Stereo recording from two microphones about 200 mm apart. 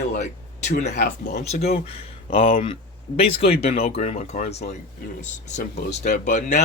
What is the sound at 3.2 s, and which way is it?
Speech, 30° left (ahead or behind).